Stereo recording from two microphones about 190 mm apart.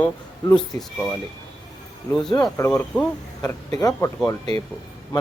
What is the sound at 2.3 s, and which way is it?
Speech, 20° left (ahead or behind).